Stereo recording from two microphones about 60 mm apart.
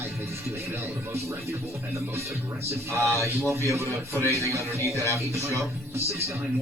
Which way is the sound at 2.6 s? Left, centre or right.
Right.